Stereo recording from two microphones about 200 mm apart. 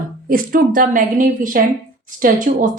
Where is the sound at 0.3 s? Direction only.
45° right (ahead or behind).